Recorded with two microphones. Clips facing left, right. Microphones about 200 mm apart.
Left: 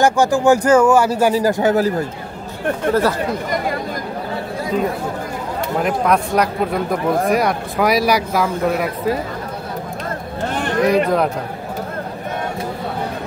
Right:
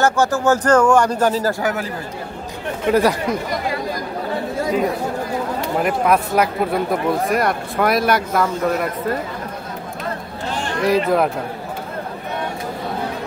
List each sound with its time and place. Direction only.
0.0 s speech: 15° left (ahead or behind)
1.6 s a man's voice: 30° left (ahead or behind)
2.9 s speech: 15° right (ahead or behind)
5.8 s speech: 5° right (ahead or behind)
10.5 s a sound: 55° left (ahead or behind)
10.9 s speech: 5° right (ahead or behind)